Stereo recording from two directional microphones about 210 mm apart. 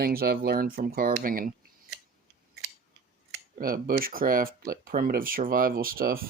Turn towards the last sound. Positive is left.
turn(degrees=-45)  # may be behind; listen again after turning